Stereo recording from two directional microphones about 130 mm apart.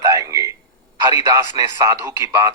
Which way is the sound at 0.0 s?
25° right (ahead or behind).